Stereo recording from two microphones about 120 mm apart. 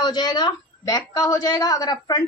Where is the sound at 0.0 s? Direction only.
35° left (ahead or behind).